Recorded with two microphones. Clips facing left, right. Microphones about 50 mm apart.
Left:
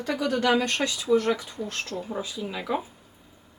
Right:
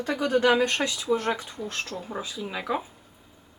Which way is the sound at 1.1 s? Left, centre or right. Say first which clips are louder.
Left 4 dB; right.